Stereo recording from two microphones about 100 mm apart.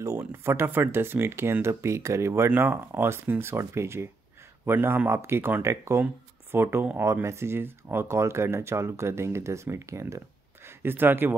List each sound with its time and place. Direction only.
0.0 s speech: 30° right (ahead or behind)